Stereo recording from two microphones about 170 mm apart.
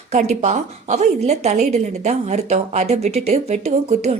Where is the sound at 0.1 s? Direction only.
40° right (ahead or behind).